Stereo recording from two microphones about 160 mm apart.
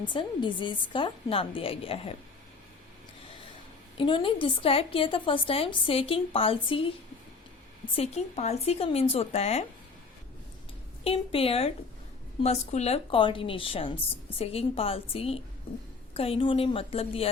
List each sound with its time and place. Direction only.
0.1 s a woman's voice: 30° left (ahead or behind)
3.9 s a woman's voice: 35° left (ahead or behind)
7.9 s a woman's voice: 40° left (ahead or behind)
11.0 s a woman's voice: 35° left (ahead or behind)